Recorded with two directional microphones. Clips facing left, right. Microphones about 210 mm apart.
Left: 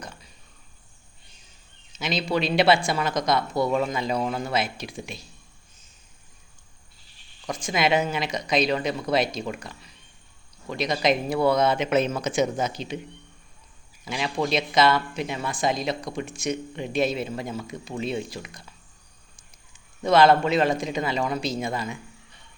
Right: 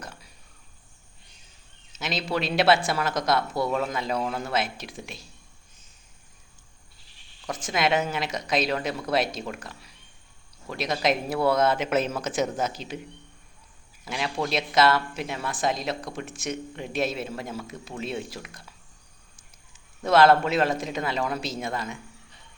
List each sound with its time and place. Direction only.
1.9 s a sound: centre (ahead or behind)
2.3 s speech: centre (ahead or behind)
7.4 s speech: 5° right (ahead or behind)
14.0 s a man's voice: centre (ahead or behind)